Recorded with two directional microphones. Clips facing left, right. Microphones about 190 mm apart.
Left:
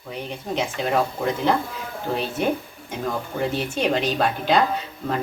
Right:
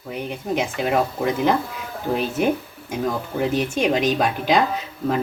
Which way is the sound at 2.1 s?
20° right (ahead or behind).